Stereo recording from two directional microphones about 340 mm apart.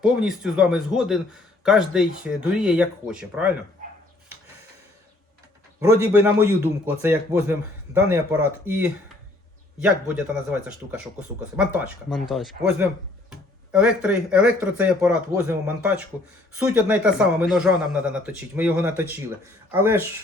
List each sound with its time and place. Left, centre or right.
0.0 s a man's voice: centre
6.8 s a man's voice: centre